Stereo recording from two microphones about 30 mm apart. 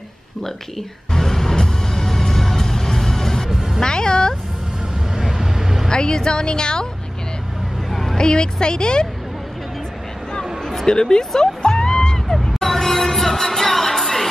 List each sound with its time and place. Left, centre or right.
0.4 s music: centre
3.4 s music: centre
3.8 s speech: left
5.1 s vehicle: right
5.9 s speech: left
7.9 s vehicle: centre
8.2 s speech: left
10.9 s music: left
12.6 s music: centre